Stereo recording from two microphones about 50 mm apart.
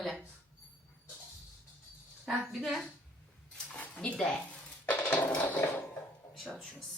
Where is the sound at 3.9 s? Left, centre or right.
Centre.